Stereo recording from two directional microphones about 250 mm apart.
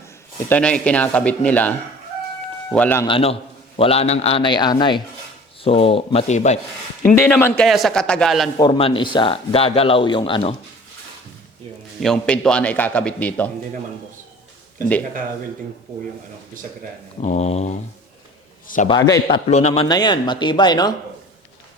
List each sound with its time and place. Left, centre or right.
0.4 s a man's voice: centre
3.1 s speech: left
7.2 s a man's voice: centre
8.5 s speech: centre
12.0 s a man's voice: centre
17.2 s speech: left
18.9 s speech: centre
19.5 s speech: left